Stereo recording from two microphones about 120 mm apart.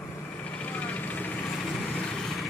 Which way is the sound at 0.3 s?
10° left (ahead or behind).